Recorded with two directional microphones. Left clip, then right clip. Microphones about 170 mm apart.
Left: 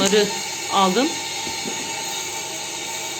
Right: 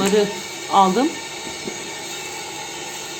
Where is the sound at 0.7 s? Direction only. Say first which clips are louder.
Right 4 dB; 15° right (ahead or behind).